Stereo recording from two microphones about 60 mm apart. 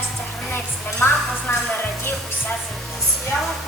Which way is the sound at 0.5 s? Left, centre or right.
Left.